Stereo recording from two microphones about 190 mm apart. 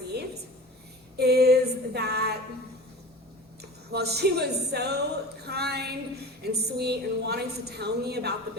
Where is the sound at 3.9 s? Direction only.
60° right (ahead or behind).